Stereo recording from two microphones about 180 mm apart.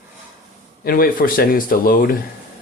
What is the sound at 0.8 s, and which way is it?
Speech, 55° left (ahead or behind).